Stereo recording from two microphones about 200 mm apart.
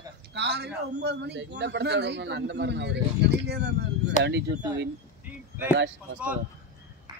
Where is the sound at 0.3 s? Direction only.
55° right (ahead or behind).